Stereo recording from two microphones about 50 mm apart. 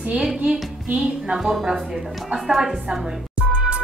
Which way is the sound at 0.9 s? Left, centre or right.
Centre.